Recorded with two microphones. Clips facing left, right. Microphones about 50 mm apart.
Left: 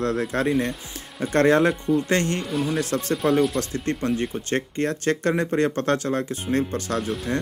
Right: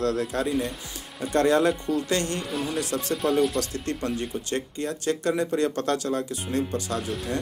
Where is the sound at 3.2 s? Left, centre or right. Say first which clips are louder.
Left 2 dB; centre.